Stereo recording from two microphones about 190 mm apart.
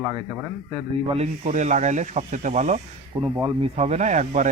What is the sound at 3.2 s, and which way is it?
Speech, 25° right (ahead or behind).